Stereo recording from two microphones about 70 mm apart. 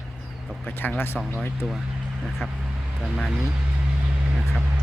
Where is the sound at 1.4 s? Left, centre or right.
Centre.